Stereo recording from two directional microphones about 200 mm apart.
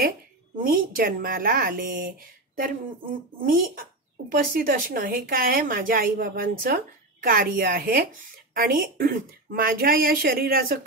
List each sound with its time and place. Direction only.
0.6 s speech: 45° right (ahead or behind)